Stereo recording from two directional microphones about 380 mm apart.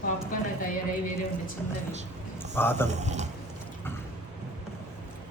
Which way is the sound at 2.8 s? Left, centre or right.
Centre.